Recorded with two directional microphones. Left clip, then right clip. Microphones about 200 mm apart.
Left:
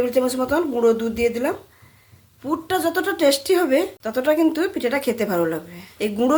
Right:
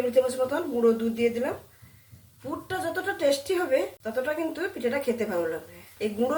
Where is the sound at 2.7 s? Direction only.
55° left (ahead or behind).